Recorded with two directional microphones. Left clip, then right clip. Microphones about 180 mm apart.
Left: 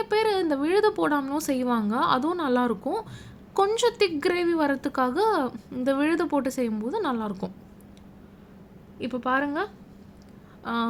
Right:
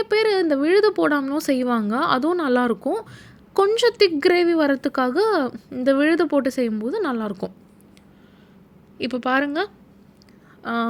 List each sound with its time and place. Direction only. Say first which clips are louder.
0.0 s a woman's voice: right 5 dB; 25° right (ahead or behind)
9.0 s a woman's voice: right 4 dB; 25° right (ahead or behind)